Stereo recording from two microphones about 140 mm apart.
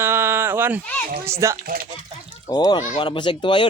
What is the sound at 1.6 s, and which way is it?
Speech, 90° right.